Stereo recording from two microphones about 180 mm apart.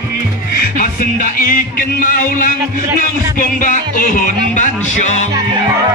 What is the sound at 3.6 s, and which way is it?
Music, 45° left (ahead or behind).